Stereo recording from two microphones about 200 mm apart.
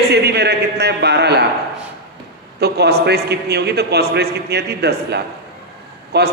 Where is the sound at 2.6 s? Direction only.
55° right (ahead or behind).